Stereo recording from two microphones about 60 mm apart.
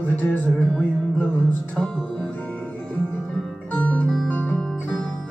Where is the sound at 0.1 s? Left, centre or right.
Left.